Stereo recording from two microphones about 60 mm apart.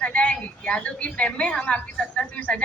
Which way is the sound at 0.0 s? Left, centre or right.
Left.